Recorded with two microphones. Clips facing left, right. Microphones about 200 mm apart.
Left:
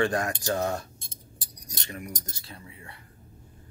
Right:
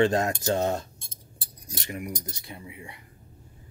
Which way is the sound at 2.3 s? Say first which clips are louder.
Right 4 dB; 20° right (ahead or behind).